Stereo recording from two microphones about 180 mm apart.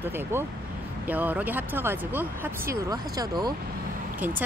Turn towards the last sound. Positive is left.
turn(degrees=-20)  # may be behind; listen again after turning